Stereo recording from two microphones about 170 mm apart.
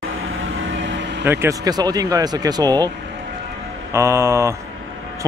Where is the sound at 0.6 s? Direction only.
90° right.